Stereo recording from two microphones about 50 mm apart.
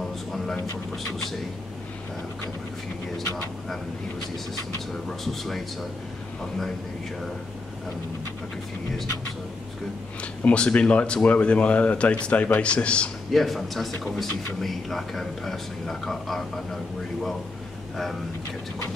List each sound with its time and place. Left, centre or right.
5.2 s speech: centre
10.4 s a man's voice: left
13.3 s speech: centre